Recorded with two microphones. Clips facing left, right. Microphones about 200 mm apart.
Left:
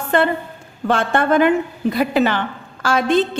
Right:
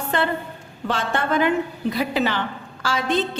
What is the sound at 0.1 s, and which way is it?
A woman's voice, 50° left (ahead or behind).